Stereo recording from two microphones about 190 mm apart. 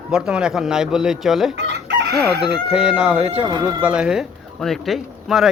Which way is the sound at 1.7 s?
65° right (ahead or behind).